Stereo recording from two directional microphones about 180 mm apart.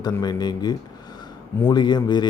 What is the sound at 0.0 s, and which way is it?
Speech, 20° left (ahead or behind).